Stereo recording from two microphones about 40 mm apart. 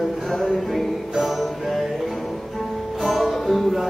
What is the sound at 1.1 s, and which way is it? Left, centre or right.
Music, centre.